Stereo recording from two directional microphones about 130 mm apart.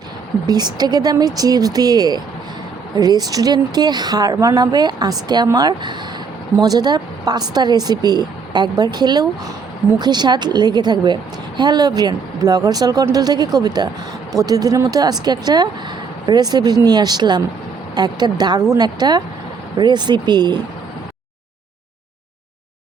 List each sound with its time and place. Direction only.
0.4 s a woman's voice: 30° right (ahead or behind)